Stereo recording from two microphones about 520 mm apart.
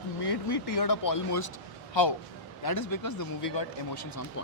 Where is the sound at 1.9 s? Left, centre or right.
Left.